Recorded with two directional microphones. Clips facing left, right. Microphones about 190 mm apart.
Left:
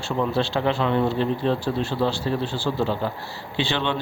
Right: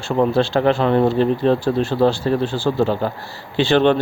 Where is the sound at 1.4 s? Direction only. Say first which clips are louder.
Right 6 dB; 75° right (ahead or behind).